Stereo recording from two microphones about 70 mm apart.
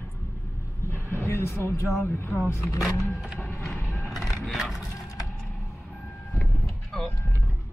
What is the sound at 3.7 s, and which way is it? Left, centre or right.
Music, left.